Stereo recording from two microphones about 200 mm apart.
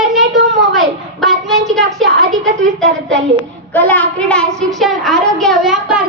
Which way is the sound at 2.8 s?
65° right (ahead or behind).